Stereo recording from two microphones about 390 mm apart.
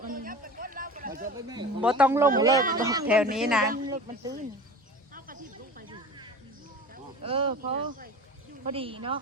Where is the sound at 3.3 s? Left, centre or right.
Centre.